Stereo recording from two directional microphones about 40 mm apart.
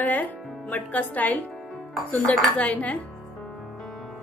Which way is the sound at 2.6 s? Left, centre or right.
Left.